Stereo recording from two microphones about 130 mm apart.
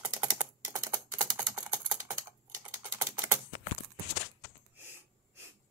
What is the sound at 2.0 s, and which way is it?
Typing, 25° right (ahead or behind).